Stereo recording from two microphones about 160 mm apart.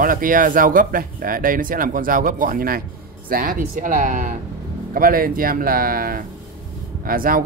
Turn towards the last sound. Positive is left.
turn(degrees=-65)  # may be behind; listen again after turning